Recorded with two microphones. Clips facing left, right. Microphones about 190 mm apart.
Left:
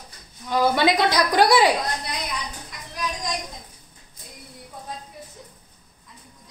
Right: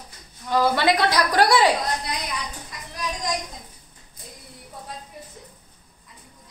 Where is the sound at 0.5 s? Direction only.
15° left (ahead or behind).